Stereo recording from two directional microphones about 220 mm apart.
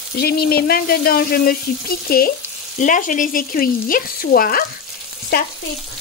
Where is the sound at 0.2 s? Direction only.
45° left (ahead or behind).